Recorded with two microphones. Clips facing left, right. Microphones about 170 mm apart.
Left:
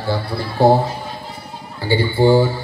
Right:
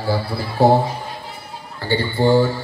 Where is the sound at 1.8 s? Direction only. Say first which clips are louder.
Left 3 dB; 10° left (ahead or behind).